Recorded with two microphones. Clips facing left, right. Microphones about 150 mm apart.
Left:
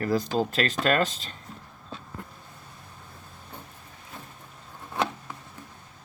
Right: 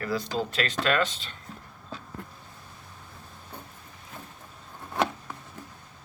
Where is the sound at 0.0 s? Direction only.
45° left (ahead or behind).